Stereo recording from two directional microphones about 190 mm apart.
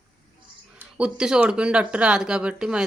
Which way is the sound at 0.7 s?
5° right (ahead or behind).